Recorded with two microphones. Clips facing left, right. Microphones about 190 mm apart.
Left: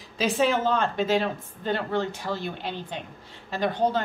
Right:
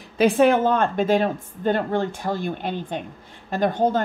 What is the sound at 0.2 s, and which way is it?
Speech, 55° right (ahead or behind).